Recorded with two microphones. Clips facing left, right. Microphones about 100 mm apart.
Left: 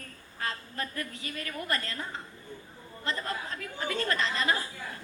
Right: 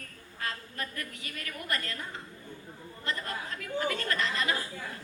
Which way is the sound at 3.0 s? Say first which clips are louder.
Left 2 dB; 30° left (ahead or behind).